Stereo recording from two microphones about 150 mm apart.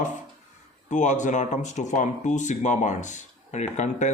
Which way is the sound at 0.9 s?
55° left (ahead or behind).